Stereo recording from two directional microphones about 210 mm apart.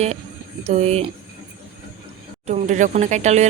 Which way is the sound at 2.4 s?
35° right (ahead or behind).